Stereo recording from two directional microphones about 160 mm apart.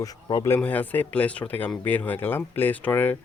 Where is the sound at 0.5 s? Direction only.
10° left (ahead or behind).